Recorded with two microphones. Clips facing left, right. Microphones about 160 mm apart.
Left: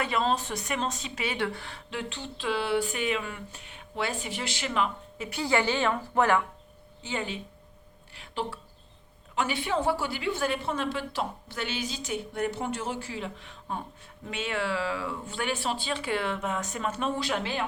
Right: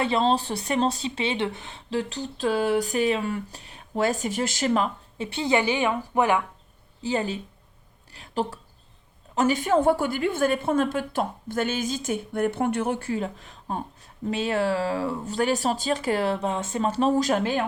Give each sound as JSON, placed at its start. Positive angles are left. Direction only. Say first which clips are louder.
{"t": 0.0, "sound": "speech", "louder": "right 5 dB", "side_deg": -30}
{"t": 1.9, "sound": "speech", "louder": "right 8 dB", "side_deg": -35}
{"t": 7.0, "sound": "a woman's voice", "louder": "right 7 dB", "side_deg": -35}